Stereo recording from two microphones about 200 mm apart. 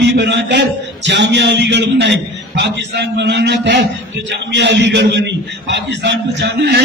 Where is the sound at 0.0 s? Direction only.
60° right (ahead or behind).